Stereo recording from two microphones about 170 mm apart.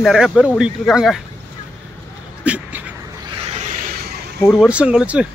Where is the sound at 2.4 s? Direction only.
10° right (ahead or behind).